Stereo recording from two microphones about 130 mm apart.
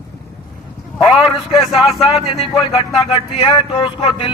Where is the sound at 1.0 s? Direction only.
Centre (ahead or behind).